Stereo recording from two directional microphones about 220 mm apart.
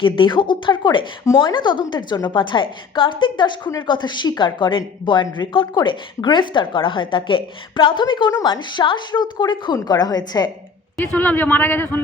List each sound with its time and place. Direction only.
0.0 s a woman's voice: 20° left (ahead or behind)
11.1 s a man's voice: 10° left (ahead or behind)